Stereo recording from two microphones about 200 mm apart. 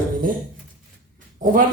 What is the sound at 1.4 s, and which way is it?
Speech, 40° right (ahead or behind).